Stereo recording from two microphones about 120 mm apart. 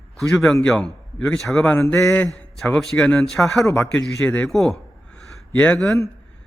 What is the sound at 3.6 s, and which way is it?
Speech, 15° left (ahead or behind).